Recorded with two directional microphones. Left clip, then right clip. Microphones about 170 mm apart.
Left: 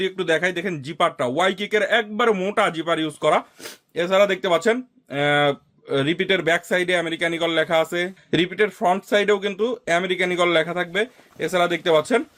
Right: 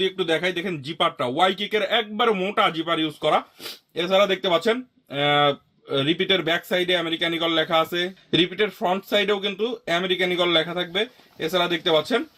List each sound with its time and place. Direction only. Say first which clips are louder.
0.0 s speech: left 1 dB; 25° left (ahead or behind)